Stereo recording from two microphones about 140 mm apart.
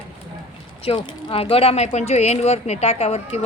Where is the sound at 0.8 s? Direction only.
40° left (ahead or behind).